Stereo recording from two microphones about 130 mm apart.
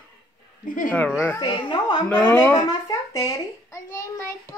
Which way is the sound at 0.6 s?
90° left.